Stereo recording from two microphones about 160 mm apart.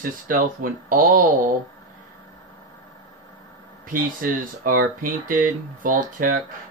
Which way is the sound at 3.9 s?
60° right (ahead or behind).